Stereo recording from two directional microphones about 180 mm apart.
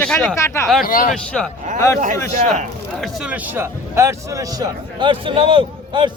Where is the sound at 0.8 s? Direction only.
50° left (ahead or behind).